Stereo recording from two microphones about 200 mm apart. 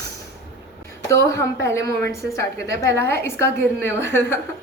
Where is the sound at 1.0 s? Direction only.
15° left (ahead or behind).